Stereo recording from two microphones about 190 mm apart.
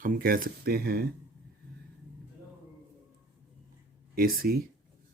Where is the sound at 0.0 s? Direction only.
50° right (ahead or behind).